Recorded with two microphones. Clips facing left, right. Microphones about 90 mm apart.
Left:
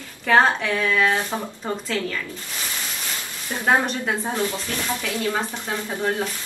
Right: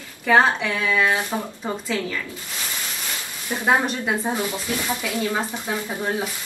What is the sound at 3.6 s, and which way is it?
A woman's voice, 5° right (ahead or behind).